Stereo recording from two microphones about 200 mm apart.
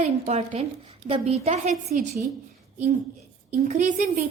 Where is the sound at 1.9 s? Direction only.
45° right (ahead or behind).